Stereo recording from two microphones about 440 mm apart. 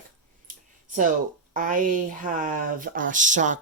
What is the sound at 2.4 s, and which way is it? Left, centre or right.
Speech, centre.